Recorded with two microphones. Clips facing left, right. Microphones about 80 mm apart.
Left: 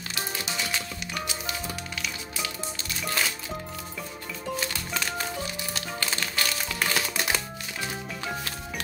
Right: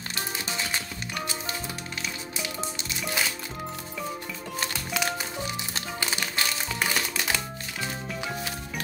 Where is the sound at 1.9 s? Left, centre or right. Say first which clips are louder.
Even; right.